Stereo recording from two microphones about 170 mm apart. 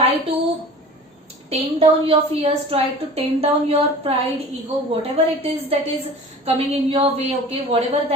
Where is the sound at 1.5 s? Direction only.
35° right (ahead or behind).